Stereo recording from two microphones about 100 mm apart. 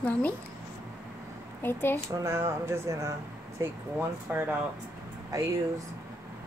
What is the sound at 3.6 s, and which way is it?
Speech, 20° right (ahead or behind).